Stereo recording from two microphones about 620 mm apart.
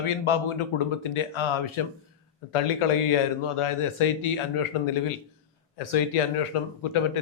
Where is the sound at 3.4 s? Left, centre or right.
Left.